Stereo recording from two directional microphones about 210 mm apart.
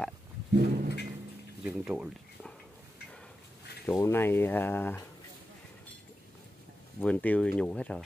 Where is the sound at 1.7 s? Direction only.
5° right (ahead or behind).